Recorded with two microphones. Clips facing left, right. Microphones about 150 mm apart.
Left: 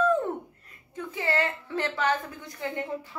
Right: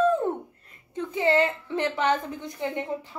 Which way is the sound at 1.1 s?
20° right (ahead or behind).